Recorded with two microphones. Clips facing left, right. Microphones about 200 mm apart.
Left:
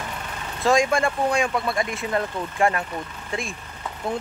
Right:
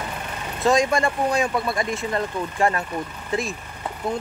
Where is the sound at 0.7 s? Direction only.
Centre (ahead or behind).